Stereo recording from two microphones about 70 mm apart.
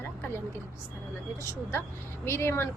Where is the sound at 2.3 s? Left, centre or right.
Left.